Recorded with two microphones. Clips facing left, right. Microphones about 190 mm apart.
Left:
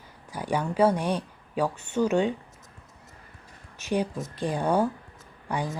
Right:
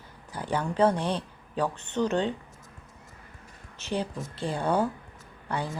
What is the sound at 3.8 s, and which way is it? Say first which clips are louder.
A woman's voice: left 4 dB; 15° left (ahead or behind).